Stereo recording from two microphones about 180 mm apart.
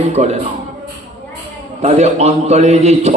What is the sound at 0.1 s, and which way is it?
Mantra, 35° right (ahead or behind).